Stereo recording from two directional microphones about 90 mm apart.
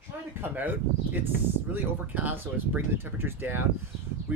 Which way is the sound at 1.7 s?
20° right (ahead or behind).